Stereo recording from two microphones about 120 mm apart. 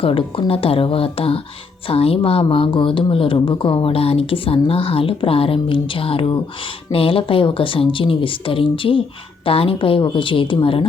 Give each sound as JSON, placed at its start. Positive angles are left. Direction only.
{"t": 0.0, "sound": "speech", "side_deg": 50}